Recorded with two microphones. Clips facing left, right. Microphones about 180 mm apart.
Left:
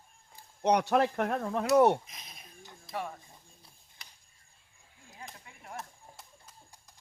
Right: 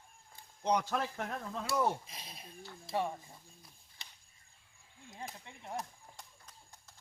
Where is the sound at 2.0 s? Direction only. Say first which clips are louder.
Right 2 dB; 30° right (ahead or behind).